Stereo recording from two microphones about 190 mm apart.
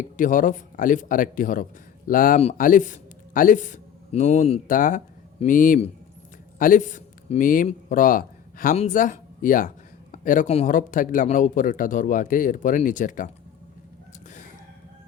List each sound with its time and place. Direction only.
0.0 s a man's voice: 45° left (ahead or behind)